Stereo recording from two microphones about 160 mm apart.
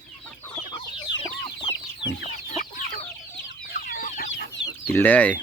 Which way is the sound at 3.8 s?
60° left (ahead or behind).